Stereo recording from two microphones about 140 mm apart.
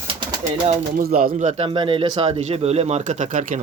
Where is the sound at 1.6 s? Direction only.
35° right (ahead or behind); by 3.6 s 65° right (ahead or behind).